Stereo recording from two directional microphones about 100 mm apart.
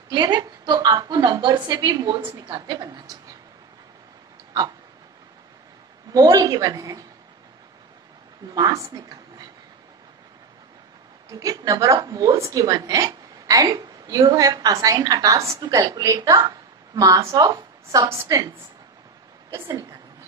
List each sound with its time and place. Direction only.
0.1 s a woman's voice: 45° right (ahead or behind)
6.1 s a woman's voice: 40° right (ahead or behind)
8.5 s a woman's voice: 40° right (ahead or behind)
11.2 s a woman's voice: 35° right (ahead or behind)
19.7 s a woman's voice: 35° right (ahead or behind)